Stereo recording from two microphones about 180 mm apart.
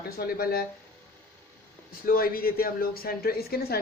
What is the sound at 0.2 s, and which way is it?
Speech, 55° left (ahead or behind).